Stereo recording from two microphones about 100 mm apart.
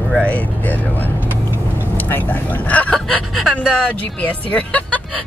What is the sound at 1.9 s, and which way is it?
Speech, 20° left (ahead or behind).